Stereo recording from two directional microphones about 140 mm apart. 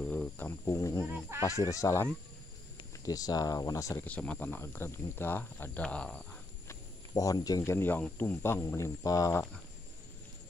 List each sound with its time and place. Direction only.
0.0 s cricket: 10° left (ahead or behind)
1.4 s speech: 25° left (ahead or behind)
4.0 s speech: 10° left (ahead or behind)
6.7 s speech: 25° left (ahead or behind)